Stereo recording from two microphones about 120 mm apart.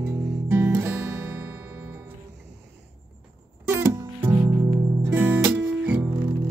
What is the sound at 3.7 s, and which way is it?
Music, 20° right (ahead or behind).